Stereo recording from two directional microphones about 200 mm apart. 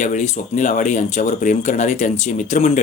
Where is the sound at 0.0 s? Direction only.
35° left (ahead or behind).